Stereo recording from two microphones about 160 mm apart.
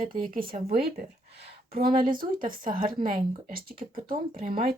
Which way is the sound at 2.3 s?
55° right (ahead or behind).